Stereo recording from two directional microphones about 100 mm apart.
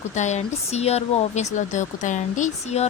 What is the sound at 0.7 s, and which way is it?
Speech, 90° left.